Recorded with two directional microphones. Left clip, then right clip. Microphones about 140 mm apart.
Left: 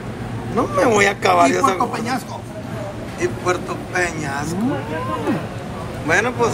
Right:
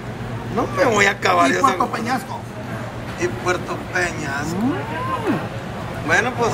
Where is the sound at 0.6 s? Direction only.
10° right (ahead or behind).